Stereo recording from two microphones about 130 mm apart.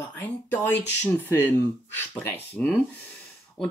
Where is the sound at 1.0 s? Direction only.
15° left (ahead or behind).